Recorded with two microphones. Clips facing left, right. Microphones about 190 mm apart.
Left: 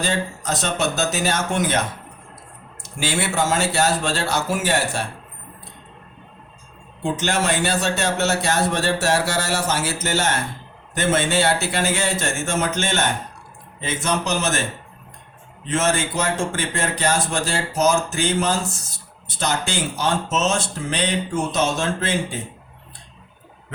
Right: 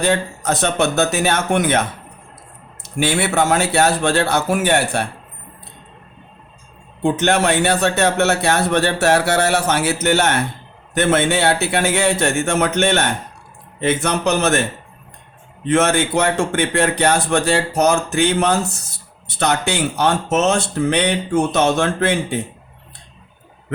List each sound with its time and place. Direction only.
0.0 s speech: 60° right (ahead or behind)
2.8 s speech: 60° right (ahead or behind)
7.0 s speech: 60° right (ahead or behind)